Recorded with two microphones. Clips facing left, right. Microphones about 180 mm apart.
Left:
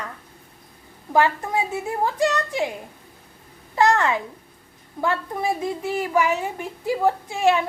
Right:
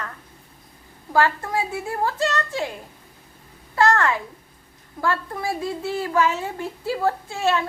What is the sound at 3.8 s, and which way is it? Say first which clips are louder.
Speech: even; 15° left (ahead or behind).